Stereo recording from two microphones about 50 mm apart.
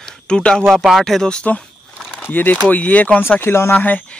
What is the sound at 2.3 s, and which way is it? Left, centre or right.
Speech, left.